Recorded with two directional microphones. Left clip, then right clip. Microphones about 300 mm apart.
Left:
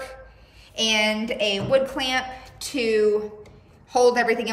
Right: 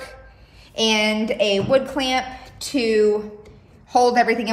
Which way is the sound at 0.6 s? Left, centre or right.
Centre.